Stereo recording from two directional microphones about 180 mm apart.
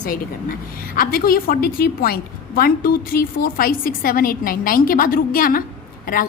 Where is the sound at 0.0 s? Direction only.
50° left (ahead or behind).